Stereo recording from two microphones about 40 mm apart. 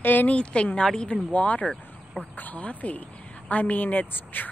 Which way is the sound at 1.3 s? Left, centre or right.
Left.